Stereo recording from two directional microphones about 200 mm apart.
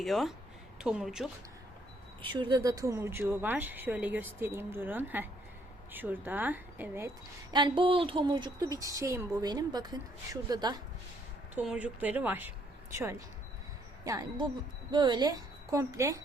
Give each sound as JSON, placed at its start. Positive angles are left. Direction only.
{"t": 0.0, "sound": "a woman's voice", "side_deg": 0}
{"t": 2.3, "sound": "speech", "side_deg": -20}
{"t": 7.5, "sound": "speech", "side_deg": -25}
{"t": 11.5, "sound": "a woman's voice", "side_deg": -5}